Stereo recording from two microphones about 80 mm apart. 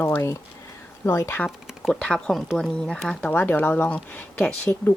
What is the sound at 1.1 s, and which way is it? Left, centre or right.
Speech, left.